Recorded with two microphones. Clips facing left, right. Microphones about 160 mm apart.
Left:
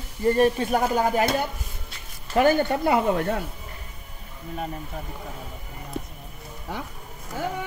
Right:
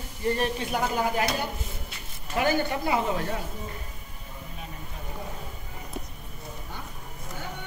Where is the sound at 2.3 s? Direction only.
50° left (ahead or behind).